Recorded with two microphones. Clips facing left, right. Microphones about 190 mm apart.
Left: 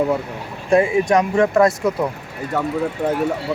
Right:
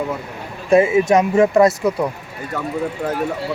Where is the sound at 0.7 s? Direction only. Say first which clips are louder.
Right 2 dB; 5° right (ahead or behind).